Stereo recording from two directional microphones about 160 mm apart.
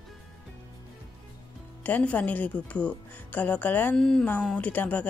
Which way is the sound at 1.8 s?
10° left (ahead or behind).